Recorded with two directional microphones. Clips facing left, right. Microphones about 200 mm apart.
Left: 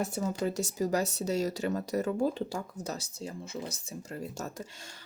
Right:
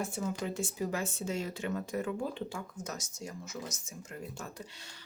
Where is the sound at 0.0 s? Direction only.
40° left (ahead or behind).